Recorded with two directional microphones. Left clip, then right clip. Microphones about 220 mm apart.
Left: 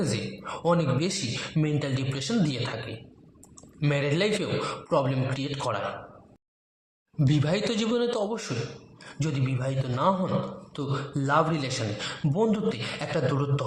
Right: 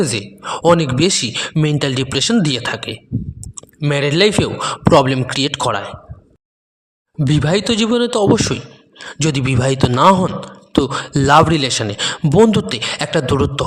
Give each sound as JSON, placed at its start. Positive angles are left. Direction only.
{"t": 0.0, "sound": "a man's voice", "side_deg": -40}
{"t": 7.2, "sound": "a man's voice", "side_deg": -35}